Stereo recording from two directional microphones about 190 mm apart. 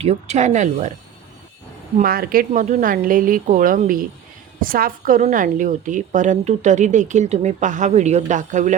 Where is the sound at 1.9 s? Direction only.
50° right (ahead or behind).